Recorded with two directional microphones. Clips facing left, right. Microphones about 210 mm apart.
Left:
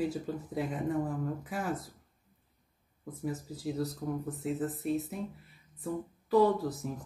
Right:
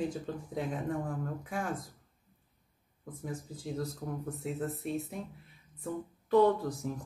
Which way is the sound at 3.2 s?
5° left (ahead or behind).